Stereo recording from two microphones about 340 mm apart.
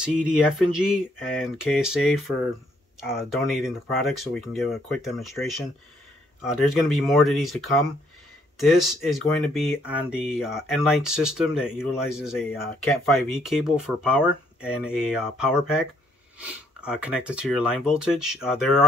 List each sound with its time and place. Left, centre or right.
0.0 s speech: centre